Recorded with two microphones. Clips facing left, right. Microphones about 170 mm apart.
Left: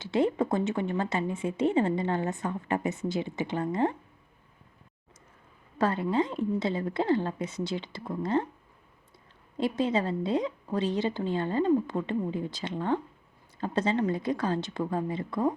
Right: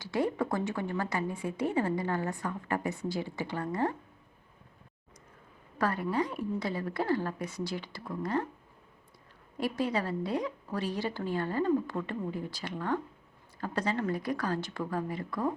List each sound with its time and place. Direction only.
0.0 s a woman's voice: 25° left (ahead or behind)
5.8 s a woman's voice: 25° left (ahead or behind)
9.6 s a woman's voice: 20° left (ahead or behind)